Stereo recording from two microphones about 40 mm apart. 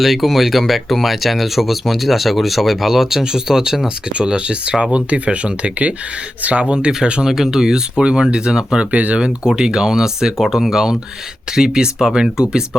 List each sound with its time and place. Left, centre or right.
0.0 s speech: centre
3.8 s speech: right
9.2 s speech: centre